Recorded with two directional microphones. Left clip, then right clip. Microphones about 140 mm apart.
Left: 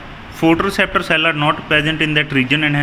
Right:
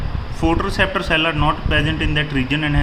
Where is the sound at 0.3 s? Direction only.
30° left (ahead or behind).